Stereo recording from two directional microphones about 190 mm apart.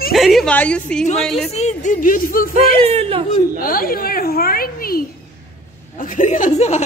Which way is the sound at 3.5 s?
50° left (ahead or behind).